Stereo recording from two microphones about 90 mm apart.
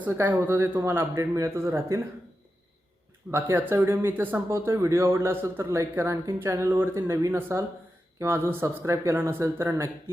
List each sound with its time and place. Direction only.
0.0 s speech: 20° right (ahead or behind)
3.5 s speech: 25° right (ahead or behind)